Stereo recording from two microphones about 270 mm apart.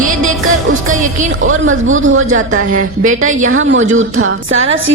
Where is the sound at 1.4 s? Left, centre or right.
Right.